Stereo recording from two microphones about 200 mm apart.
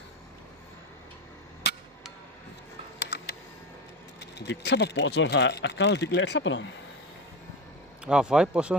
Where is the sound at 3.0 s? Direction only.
60° left (ahead or behind).